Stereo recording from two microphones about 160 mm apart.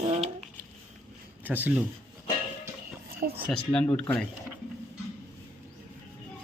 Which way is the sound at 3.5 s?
5° left (ahead or behind).